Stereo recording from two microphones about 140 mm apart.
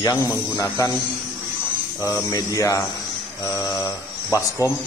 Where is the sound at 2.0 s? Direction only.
25° left (ahead or behind).